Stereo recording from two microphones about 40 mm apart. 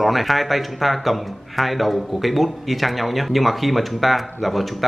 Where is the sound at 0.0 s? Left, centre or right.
Centre.